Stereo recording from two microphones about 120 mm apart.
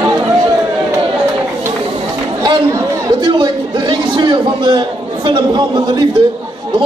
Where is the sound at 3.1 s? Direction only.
35° right (ahead or behind).